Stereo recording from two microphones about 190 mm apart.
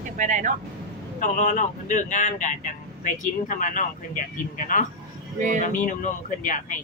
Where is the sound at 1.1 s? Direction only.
40° left (ahead or behind).